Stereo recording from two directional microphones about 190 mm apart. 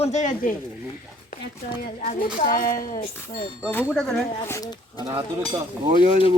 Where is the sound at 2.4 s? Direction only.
45° left (ahead or behind).